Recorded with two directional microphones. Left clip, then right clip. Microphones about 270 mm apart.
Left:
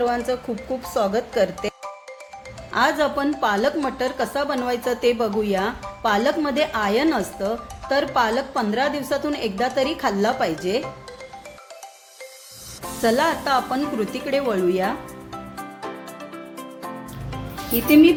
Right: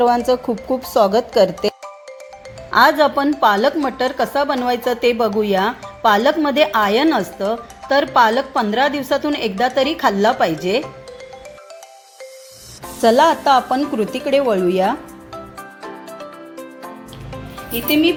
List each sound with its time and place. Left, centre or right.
0.0 s speech: right
13.0 s speech: right
17.8 s a woman's voice: left